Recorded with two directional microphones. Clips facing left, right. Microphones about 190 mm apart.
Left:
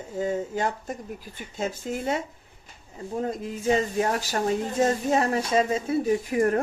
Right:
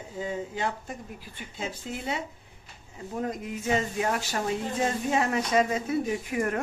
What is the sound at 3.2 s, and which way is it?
Speech, 30° left (ahead or behind).